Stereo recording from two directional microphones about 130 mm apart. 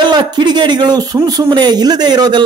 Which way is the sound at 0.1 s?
35° right (ahead or behind).